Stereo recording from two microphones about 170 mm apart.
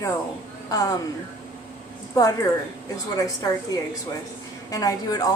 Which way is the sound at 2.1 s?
20° left (ahead or behind).